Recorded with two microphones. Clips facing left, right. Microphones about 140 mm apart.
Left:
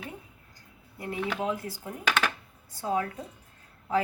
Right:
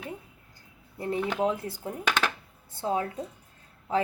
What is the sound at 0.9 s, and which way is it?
Speech, 30° right (ahead or behind).